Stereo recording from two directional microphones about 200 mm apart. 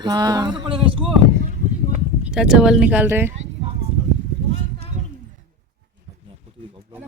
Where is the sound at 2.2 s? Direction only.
5° right (ahead or behind).